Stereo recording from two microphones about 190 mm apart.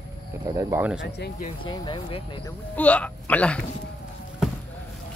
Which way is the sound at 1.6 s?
25° left (ahead or behind).